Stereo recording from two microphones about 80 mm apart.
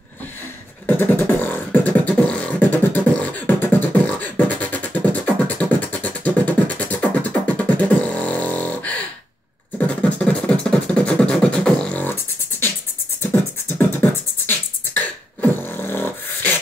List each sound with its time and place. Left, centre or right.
0.8 s beatboxing: left
12.0 s beatboxing: left